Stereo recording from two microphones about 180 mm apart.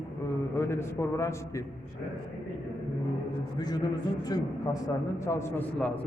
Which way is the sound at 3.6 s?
20° left (ahead or behind).